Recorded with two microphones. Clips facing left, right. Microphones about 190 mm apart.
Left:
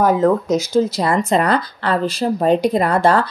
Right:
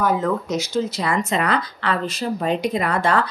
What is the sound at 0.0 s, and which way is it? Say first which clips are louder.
Speech: left 6 dB; 45° left (ahead or behind).